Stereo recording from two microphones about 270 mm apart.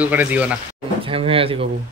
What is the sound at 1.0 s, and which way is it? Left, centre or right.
Speech, right.